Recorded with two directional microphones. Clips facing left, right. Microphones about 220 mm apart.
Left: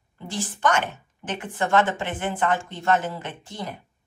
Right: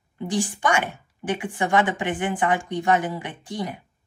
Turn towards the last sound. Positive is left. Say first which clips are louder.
# right 4 dB
turn(degrees=-15)  # may be behind; listen again after turning